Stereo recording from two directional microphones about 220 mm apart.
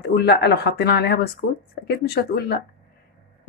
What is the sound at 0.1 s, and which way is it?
Speech, 50° left (ahead or behind).